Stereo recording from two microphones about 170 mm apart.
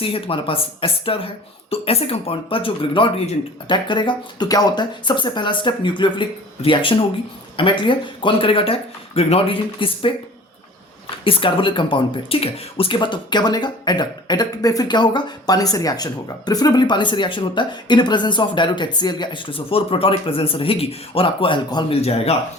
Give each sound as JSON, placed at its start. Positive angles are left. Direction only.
{"t": 0.0, "sound": "speech", "side_deg": 30}
{"t": 11.2, "sound": "speech", "side_deg": 30}